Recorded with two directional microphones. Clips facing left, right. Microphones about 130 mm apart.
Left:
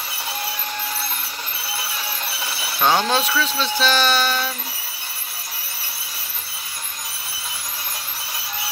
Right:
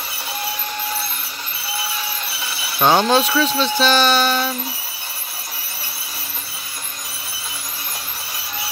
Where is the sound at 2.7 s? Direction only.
25° right (ahead or behind).